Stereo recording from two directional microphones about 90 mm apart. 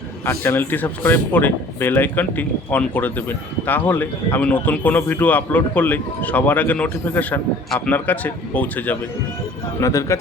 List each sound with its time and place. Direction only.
0.3 s speech: 25° left (ahead or behind)
9.8 s speech: 35° left (ahead or behind)